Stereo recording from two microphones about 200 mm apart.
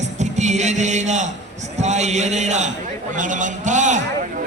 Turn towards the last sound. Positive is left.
turn(degrees=-35)  # may be behind; listen again after turning